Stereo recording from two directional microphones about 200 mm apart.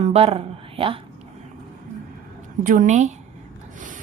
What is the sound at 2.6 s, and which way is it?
Speech, 40° right (ahead or behind).